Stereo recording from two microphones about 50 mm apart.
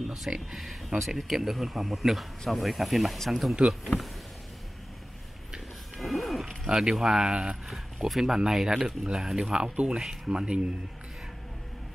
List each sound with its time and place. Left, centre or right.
0.0 s a sound: centre
0.6 s speech: centre
5.9 s wild animals: centre
6.8 s speech: centre